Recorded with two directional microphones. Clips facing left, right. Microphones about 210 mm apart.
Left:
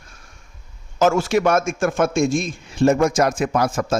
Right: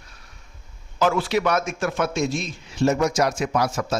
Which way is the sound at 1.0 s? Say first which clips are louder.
Left 4 dB; 45° left (ahead or behind).